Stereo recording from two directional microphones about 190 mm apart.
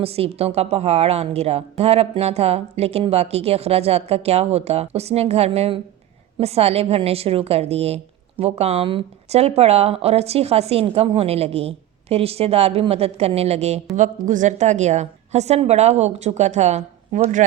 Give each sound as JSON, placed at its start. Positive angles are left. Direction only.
{"t": 0.0, "sound": "a woman's voice", "side_deg": -30}